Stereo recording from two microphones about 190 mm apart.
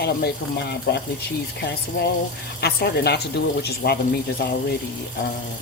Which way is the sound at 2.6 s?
55° left (ahead or behind).